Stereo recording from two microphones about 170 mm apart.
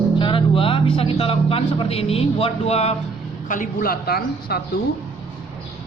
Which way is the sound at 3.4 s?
50° left (ahead or behind).